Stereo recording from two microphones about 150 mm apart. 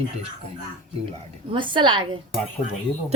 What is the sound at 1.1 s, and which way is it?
Speech, 35° right (ahead or behind).